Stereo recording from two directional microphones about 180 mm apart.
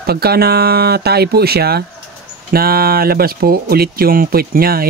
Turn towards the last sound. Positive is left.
turn(degrees=-55)  # may be behind; listen again after turning